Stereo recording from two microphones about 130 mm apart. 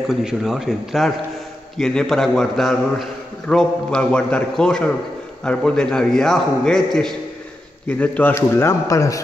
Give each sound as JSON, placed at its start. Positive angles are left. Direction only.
{"t": 0.1, "sound": "a man's voice", "side_deg": -5}